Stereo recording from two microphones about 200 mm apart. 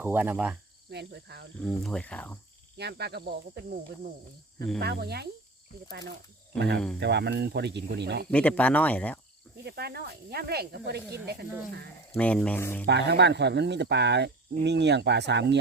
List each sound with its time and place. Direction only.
0.0 s cricket: 10° right (ahead or behind)
0.9 s speech: 55° right (ahead or behind)
1.6 s speech: 5° left (ahead or behind)
2.7 s speech: 55° right (ahead or behind)
7.0 s speech: 55° right (ahead or behind)
8.3 s speech: 5° left (ahead or behind)
9.6 s speech: 50° right (ahead or behind)
12.1 s speech: 5° left (ahead or behind)
12.8 s speech: 60° right (ahead or behind)